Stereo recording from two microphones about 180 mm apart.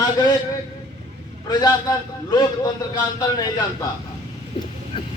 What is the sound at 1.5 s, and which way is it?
A man's voice, 20° left (ahead or behind).